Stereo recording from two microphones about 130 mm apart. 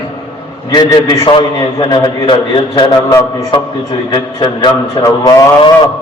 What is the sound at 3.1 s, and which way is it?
Speech, 25° left (ahead or behind).